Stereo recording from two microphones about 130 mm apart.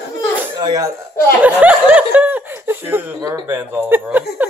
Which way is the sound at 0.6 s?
35° right (ahead or behind).